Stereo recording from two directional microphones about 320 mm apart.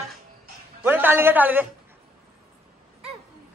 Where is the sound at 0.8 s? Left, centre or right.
Centre.